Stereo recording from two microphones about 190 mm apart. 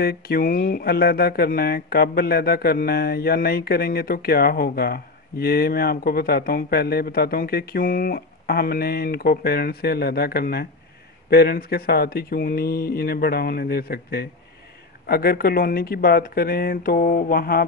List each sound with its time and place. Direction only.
0.0 s speech: 55° left (ahead or behind)